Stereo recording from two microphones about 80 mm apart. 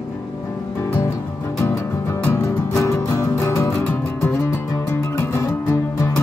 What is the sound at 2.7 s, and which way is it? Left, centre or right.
Music, left.